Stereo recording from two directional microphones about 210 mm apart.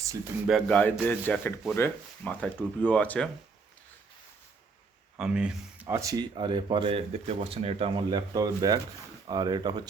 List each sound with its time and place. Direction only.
0.4 s speech: centre (ahead or behind)
5.1 s speech: 5° right (ahead or behind)